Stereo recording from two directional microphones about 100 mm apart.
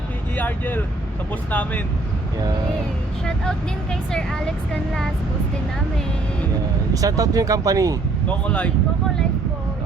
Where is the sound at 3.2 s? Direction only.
5° left (ahead or behind).